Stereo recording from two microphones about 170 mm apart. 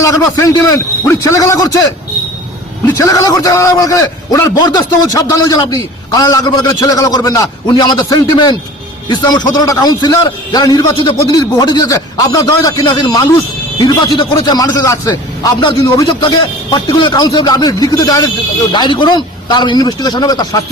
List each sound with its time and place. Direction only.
0.0 s a man's voice: 20° left (ahead or behind)
2.8 s a man's voice: 20° left (ahead or behind)